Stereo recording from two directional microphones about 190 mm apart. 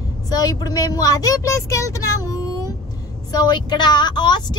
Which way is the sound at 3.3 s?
20° left (ahead or behind).